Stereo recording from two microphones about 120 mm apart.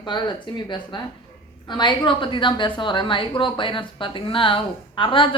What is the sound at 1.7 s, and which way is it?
A woman's voice, 40° left (ahead or behind).